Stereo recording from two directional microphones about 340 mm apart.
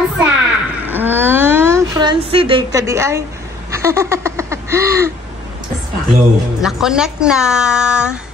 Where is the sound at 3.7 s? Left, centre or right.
Centre.